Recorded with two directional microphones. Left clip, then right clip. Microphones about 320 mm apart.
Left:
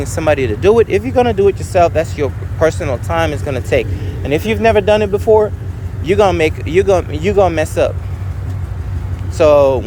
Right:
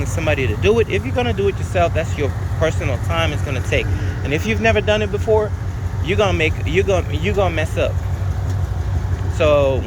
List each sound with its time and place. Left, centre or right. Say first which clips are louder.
0.0 s speech: left 6 dB; centre
9.4 s speech: left 6 dB; centre